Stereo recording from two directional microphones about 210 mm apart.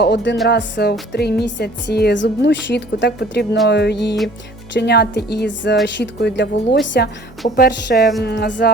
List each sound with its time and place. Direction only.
0.0 s a woman's voice: 55° left (ahead or behind)